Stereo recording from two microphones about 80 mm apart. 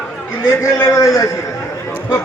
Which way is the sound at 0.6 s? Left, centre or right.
Left.